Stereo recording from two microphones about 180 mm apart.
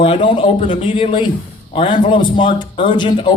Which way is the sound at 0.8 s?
25° left (ahead or behind).